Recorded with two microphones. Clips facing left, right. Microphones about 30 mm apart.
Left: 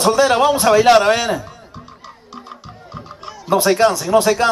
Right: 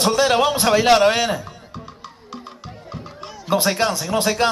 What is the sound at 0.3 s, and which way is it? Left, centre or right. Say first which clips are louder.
A man's voice: left 4 dB; centre.